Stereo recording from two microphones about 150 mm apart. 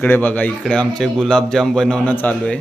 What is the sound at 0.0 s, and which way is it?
A man's voice, 10° left (ahead or behind).